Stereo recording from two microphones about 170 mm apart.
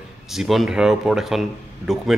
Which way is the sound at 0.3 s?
Centre (ahead or behind).